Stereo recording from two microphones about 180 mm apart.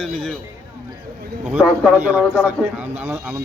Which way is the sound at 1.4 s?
5° right (ahead or behind).